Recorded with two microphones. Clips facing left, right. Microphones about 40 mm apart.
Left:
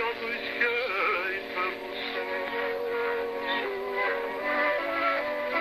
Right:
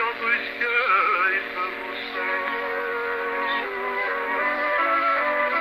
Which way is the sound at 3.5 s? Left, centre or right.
Centre.